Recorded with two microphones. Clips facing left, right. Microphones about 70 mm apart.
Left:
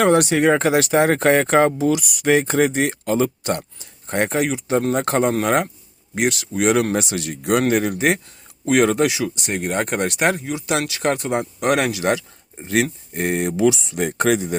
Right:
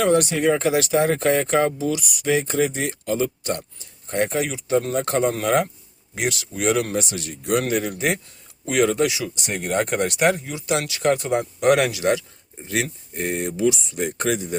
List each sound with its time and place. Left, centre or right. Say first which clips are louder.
0.0 s speech: left 3 dB; left
4.1 s speech: left 3 dB; left
5.3 s speech: left 2 dB; left
6.9 s a man's voice: left 3 dB; left
7.8 s speech: left 4 dB; left
9.5 s speech: right 1 dB; centre
10.2 s speech: even; left
11.3 s speech: right 1 dB; left